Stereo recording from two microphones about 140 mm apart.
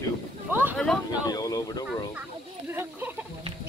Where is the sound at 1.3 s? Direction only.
25° left (ahead or behind).